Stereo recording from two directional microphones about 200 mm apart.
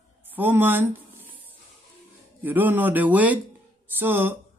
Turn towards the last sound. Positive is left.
turn(degrees=-10)  # may be behind; listen again after turning